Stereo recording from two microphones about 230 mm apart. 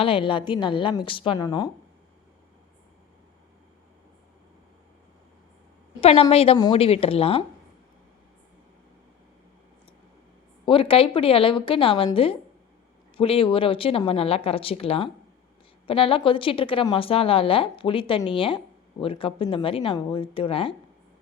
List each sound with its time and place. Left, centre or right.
0.0 s a woman's voice: left
6.0 s a woman's voice: left
10.7 s a woman's voice: left